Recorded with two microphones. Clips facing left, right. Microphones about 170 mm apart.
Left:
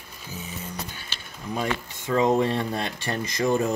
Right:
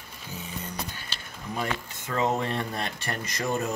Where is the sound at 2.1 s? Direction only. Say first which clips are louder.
Left 6 dB; 15° left (ahead or behind).